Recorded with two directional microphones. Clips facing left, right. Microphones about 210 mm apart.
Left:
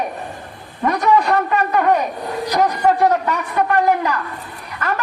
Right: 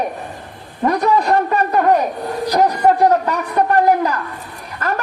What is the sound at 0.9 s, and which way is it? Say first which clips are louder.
A man's voice: left 1 dB; 35° right (ahead or behind).